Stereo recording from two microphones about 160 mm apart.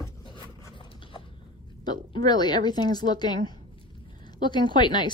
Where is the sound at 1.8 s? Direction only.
25° left (ahead or behind).